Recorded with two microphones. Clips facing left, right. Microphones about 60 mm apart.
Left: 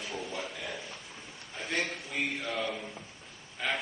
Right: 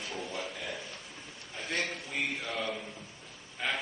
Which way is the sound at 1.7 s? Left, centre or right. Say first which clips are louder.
Left 1 dB; centre.